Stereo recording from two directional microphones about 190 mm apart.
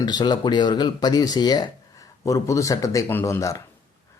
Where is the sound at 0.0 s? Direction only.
20° left (ahead or behind).